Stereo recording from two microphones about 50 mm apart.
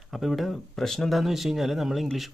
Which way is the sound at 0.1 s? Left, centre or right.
Centre.